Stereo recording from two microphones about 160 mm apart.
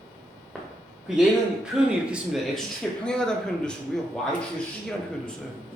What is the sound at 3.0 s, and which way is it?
Speech, 5° left (ahead or behind).